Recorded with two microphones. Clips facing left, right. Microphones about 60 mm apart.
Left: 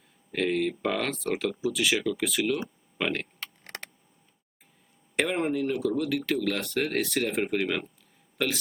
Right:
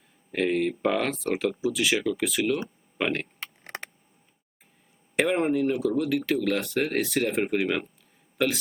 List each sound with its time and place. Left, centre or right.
0.3 s speech: centre
3.4 s a sound: centre
5.1 s speech: centre